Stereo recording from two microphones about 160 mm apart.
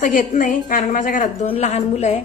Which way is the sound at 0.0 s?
55° left (ahead or behind).